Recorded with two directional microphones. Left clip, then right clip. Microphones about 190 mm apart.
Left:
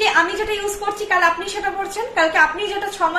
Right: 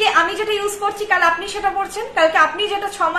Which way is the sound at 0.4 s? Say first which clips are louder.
Right 3 dB; 10° right (ahead or behind).